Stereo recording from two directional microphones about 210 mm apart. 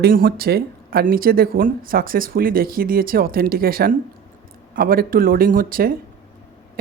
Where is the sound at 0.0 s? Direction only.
45° right (ahead or behind).